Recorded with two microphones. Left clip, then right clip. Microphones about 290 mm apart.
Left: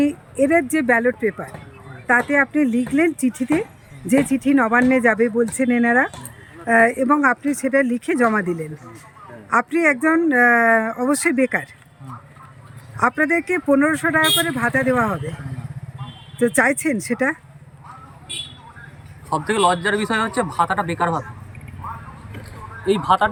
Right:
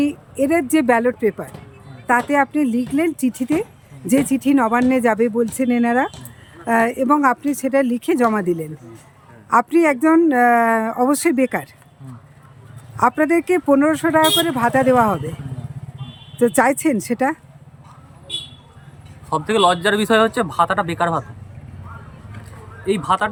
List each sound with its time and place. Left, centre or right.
0.0 s speech: centre
13.0 s speech: centre
16.4 s speech: centre
19.3 s a man's voice: centre
19.6 s a man's voice: centre